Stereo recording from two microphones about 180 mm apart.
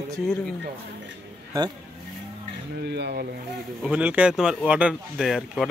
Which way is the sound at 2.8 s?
65° right (ahead or behind).